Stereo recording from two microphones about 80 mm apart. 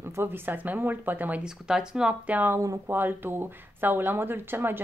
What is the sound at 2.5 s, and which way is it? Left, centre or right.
Speech, right.